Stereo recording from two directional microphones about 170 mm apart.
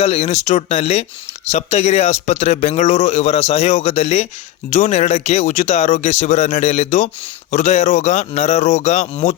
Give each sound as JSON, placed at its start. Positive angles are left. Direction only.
{"t": 0.0, "sound": "speech", "side_deg": 40}